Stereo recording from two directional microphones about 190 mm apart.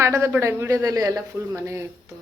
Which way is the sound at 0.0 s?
15° right (ahead or behind).